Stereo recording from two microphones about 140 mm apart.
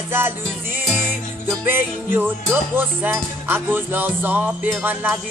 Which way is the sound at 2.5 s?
15° right (ahead or behind).